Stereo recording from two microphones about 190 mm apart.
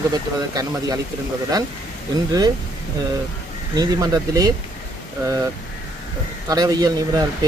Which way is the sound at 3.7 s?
20° right (ahead or behind).